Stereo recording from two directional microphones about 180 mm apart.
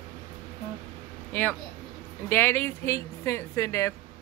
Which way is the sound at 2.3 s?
10° left (ahead or behind).